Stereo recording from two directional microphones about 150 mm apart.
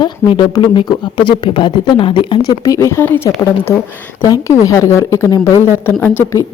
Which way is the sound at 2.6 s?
20° left (ahead or behind).